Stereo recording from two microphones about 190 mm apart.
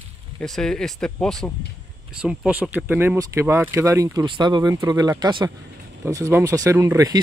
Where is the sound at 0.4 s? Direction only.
5° left (ahead or behind).